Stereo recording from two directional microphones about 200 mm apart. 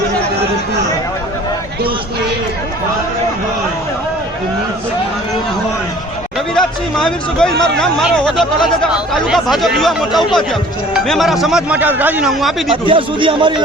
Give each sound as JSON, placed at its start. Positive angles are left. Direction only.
{"t": 6.5, "sound": "speech", "side_deg": 5}
{"t": 12.7, "sound": "speech", "side_deg": -25}